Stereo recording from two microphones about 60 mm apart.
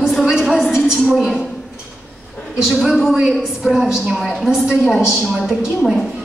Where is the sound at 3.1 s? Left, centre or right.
Centre.